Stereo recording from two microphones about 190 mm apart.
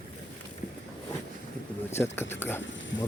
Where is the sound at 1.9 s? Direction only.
10° left (ahead or behind).